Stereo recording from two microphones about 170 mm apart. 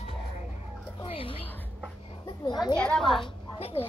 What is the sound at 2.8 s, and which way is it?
Speech, 5° left (ahead or behind).